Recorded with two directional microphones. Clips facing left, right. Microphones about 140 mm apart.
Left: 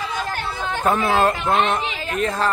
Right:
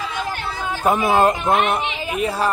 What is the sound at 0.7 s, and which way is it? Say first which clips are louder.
A man's voice: right 2 dB; 15° right (ahead or behind).